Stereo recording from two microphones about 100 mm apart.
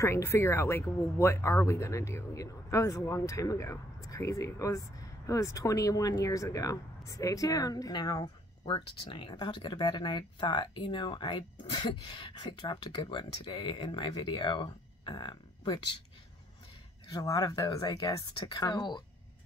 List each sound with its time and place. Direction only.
0.0 s speech: 25° left (ahead or behind)
8.6 s speech: 55° left (ahead or behind)
17.1 s speech: 40° left (ahead or behind)